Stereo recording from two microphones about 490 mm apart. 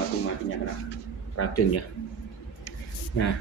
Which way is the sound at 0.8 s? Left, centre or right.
Left.